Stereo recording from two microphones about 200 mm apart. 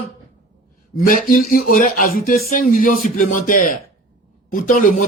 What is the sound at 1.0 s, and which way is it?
Speech, 45° left (ahead or behind).